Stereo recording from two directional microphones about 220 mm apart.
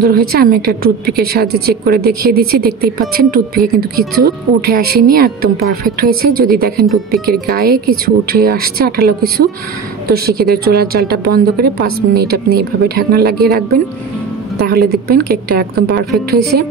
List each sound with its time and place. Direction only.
0.0 s speech: 45° right (ahead or behind)